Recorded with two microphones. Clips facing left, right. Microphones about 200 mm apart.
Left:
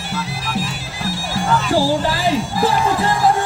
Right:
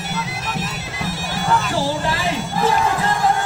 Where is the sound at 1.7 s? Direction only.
30° left (ahead or behind).